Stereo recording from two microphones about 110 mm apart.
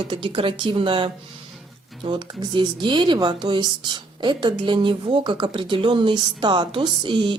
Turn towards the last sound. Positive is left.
turn(degrees=-45)  # may be behind; listen again after turning